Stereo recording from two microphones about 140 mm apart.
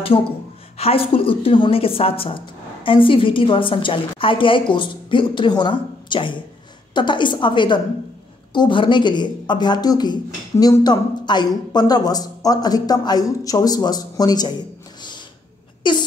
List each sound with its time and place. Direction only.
0.7 s speech: 45° left (ahead or behind); by 14.5 s 30° left (ahead or behind)
15.8 s speech: 35° left (ahead or behind)